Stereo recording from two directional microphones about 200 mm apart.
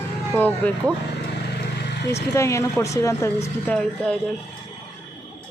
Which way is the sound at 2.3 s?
15° left (ahead or behind).